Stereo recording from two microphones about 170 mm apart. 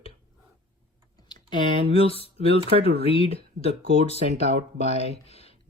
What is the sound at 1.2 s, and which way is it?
Speech, 30° left (ahead or behind).